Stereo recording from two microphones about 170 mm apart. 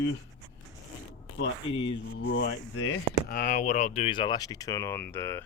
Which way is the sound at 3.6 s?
40° left (ahead or behind).